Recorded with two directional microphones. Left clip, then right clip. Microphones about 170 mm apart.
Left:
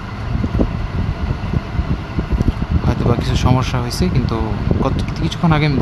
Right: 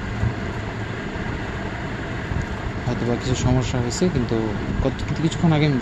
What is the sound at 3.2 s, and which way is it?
Speech, 20° left (ahead or behind).